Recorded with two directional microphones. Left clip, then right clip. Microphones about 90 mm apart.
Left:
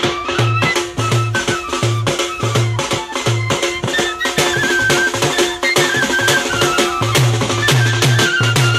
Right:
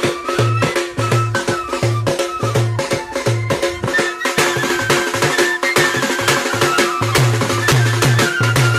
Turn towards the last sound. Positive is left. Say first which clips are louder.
# even
turn(degrees=35)  # may be behind; listen again after turning